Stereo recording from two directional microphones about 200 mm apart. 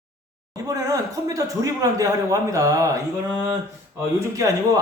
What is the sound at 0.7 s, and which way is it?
A man's voice, 15° right (ahead or behind).